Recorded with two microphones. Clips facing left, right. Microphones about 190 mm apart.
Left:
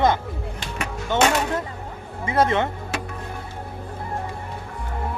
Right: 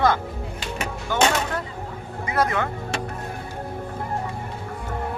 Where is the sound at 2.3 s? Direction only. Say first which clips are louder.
Left 3 dB; 25° left (ahead or behind).